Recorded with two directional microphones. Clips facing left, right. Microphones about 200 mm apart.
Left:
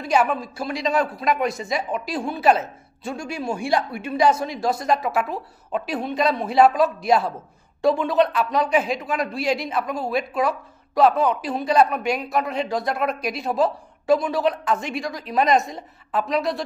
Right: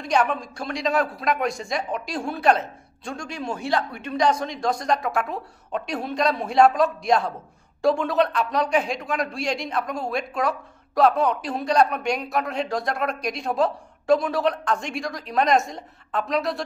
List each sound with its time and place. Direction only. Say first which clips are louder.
0.0 s speech: left 2 dB; 5° left (ahead or behind)